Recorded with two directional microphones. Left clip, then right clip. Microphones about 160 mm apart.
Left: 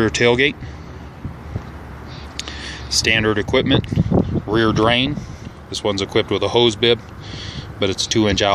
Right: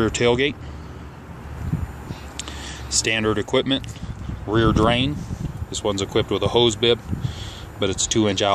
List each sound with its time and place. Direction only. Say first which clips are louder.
0.0 s speech: left 4 dB; 5° left (ahead or behind)
2.3 s speech: left 5 dB; centre (ahead or behind)